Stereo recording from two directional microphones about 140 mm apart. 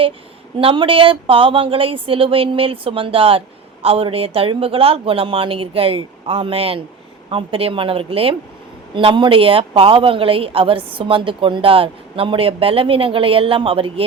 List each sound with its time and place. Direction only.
0.6 s speech: 40° right (ahead or behind)